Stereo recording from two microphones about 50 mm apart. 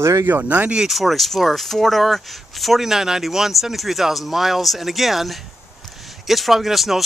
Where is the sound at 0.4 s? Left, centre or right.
Right.